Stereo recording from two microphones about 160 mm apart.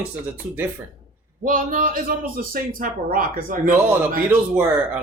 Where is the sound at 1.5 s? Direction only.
60° right (ahead or behind).